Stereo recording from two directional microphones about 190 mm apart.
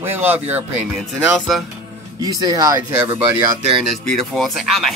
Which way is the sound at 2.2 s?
20° right (ahead or behind).